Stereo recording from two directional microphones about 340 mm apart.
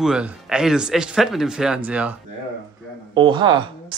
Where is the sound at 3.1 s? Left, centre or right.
Centre.